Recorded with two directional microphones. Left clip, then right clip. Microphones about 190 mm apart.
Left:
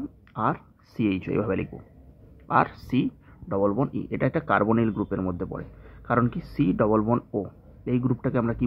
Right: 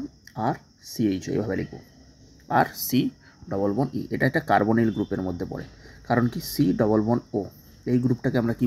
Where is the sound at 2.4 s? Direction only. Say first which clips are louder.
Even; 15° right (ahead or behind).